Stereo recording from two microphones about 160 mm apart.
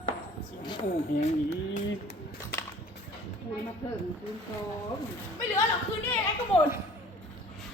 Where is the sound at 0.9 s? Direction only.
50° left (ahead or behind).